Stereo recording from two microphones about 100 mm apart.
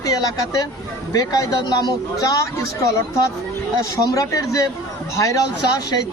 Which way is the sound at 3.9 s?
35° left (ahead or behind).